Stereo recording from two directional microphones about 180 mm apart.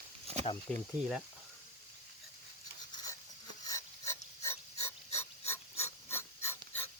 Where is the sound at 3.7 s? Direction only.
15° left (ahead or behind).